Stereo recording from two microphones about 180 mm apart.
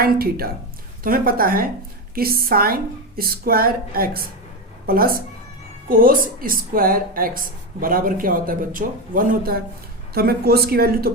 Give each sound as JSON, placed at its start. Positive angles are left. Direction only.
{"t": 0.0, "sound": "a woman's voice", "side_deg": -60}